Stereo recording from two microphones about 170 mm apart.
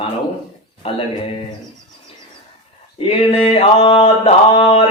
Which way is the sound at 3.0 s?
35° left (ahead or behind).